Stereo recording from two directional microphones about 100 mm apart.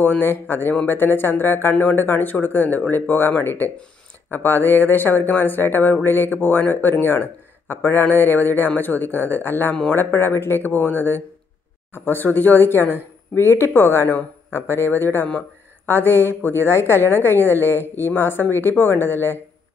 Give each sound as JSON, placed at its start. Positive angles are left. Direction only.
{"t": 0.0, "sound": "speech", "side_deg": 20}